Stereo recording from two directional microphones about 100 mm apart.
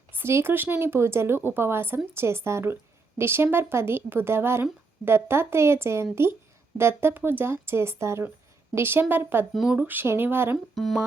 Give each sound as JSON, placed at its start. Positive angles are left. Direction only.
{"t": 0.1, "sound": "speech", "side_deg": -25}
{"t": 9.5, "sound": "speech", "side_deg": -5}
{"t": 9.7, "sound": "speech", "side_deg": -20}